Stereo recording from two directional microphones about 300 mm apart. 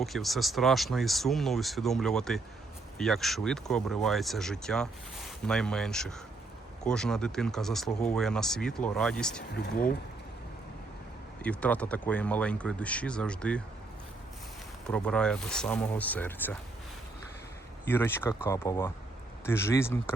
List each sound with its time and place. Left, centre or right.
0.0 s speech: centre
9.6 s speech: left
11.4 s speech: centre
14.8 s speech: centre
17.8 s speech: centre